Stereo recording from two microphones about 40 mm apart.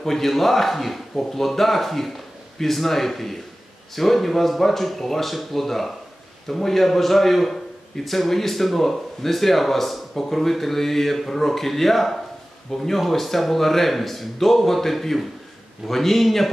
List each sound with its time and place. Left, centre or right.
0.0 s a man's voice: centre